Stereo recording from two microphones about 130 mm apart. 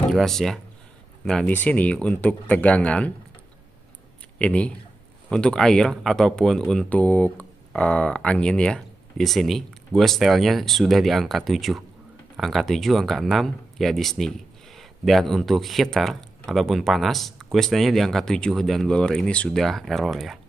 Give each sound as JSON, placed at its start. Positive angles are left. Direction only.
{"t": 0.1, "sound": "speech", "side_deg": 0}
{"t": 4.4, "sound": "speech", "side_deg": 10}